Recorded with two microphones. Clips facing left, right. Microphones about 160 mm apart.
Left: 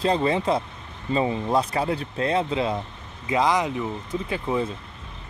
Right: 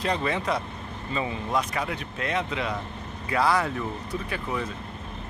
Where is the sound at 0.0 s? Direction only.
30° left (ahead or behind).